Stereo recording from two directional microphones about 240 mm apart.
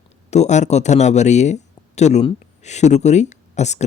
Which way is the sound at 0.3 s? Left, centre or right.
Left.